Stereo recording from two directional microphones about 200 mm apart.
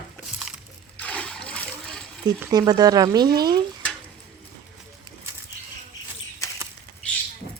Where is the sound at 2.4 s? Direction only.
20° right (ahead or behind).